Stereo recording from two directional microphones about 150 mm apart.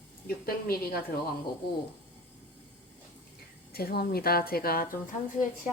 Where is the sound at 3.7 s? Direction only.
90° left; by 5.1 s 70° left (ahead or behind).